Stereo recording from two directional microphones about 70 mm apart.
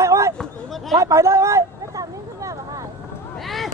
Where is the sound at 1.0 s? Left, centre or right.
Right.